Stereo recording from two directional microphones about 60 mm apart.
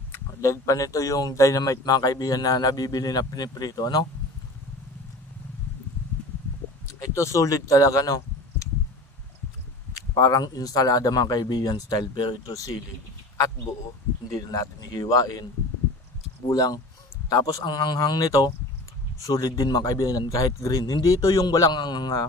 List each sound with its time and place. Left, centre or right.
0.4 s speech: left
7.0 s speech: left
9.9 s speech: left
14.4 s speech: left
16.4 s speech: left
17.3 s speech: left